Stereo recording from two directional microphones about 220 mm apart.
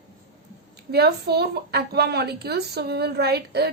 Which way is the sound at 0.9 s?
50° right (ahead or behind).